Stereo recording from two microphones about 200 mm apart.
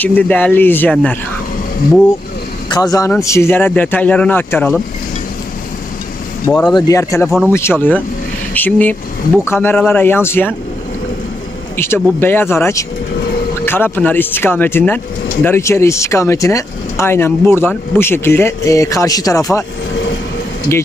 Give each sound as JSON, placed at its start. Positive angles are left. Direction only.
{"t": 0.0, "sound": "speech", "side_deg": 10}
{"t": 2.7, "sound": "speech", "side_deg": 20}
{"t": 6.4, "sound": "speech", "side_deg": 10}
{"t": 11.7, "sound": "speech", "side_deg": 10}